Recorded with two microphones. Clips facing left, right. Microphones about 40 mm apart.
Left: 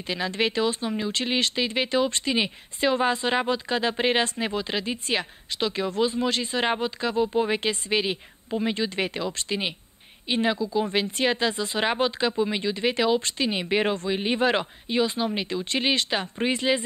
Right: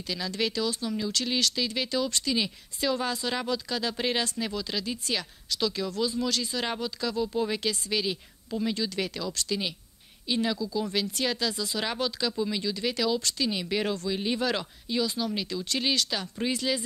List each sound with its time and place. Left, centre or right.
0.0 s speech: left